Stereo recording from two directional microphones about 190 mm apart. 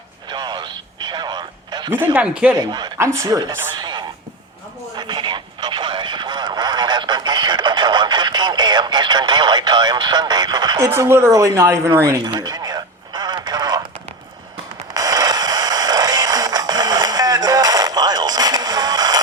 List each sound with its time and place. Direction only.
0.3 s radio: 25° right (ahead or behind)
2.1 s speech: 5° right (ahead or behind)
2.6 s speech: 20° right (ahead or behind)
4.9 s radio: 25° right (ahead or behind)
14.9 s a sound: 20° right (ahead or behind)